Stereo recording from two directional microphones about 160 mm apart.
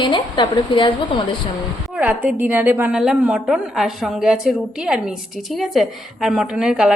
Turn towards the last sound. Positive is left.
turn(degrees=-5)  # may be behind; listen again after turning